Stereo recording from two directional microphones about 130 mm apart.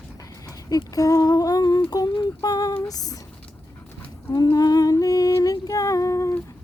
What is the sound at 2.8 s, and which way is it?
Speech, 30° left (ahead or behind).